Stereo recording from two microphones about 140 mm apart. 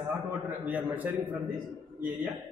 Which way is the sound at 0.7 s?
10° right (ahead or behind).